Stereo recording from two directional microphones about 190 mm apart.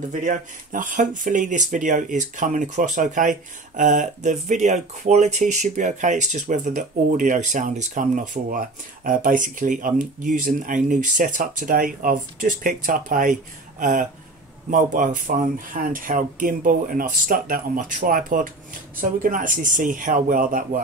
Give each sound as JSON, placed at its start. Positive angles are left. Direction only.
{"t": 0.1, "sound": "speech", "side_deg": -40}